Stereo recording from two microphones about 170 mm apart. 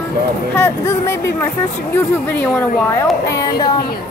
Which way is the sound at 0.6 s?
15° left (ahead or behind).